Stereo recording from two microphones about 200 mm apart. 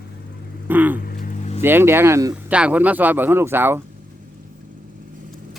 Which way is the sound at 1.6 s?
10° right (ahead or behind).